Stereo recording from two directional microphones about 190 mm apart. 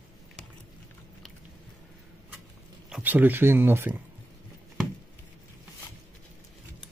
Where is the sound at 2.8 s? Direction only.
5° right (ahead or behind).